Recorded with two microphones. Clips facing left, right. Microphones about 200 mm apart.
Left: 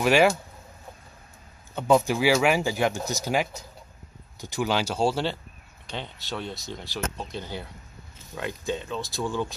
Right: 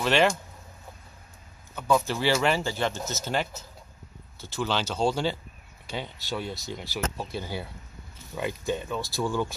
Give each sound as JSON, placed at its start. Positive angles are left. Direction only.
{"t": 0.0, "sound": "speech", "side_deg": 10}
{"t": 1.8, "sound": "speech", "side_deg": 20}
{"t": 8.9, "sound": "speech", "side_deg": 20}